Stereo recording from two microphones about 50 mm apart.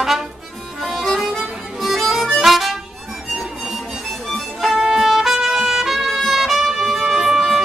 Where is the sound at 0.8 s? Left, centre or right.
Centre.